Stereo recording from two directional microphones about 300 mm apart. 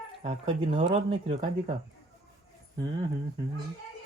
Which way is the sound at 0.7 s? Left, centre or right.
Centre.